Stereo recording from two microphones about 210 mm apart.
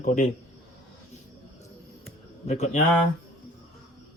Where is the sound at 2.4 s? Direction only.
35° left (ahead or behind).